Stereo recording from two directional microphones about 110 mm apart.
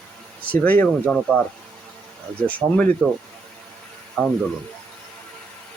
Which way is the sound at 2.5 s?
15° left (ahead or behind).